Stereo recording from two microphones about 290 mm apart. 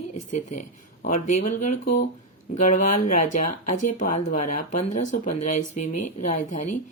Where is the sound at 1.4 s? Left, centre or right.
Left.